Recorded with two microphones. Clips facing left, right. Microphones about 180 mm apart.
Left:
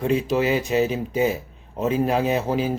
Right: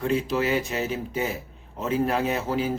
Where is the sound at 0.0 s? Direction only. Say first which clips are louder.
Left 3 dB; 20° left (ahead or behind).